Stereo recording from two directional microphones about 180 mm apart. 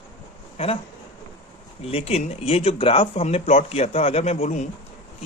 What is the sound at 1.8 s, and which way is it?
Speech, 35° left (ahead or behind).